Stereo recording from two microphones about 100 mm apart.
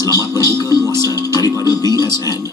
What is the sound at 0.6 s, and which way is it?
Speech, 40° left (ahead or behind).